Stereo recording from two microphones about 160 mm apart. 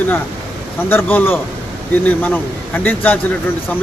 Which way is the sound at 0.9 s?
15° left (ahead or behind).